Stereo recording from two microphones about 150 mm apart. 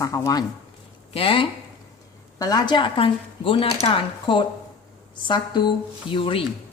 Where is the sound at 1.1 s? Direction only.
35° left (ahead or behind).